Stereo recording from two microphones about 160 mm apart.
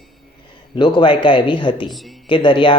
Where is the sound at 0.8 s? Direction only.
30° left (ahead or behind).